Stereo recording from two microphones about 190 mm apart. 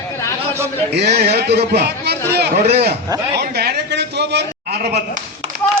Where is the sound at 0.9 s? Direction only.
60° right (ahead or behind).